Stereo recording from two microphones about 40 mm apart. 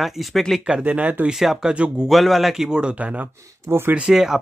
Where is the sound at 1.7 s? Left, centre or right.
Right.